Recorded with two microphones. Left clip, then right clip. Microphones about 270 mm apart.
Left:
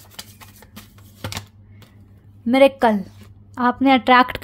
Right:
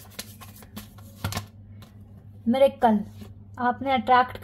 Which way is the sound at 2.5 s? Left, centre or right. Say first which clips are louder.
Left 5 dB; left.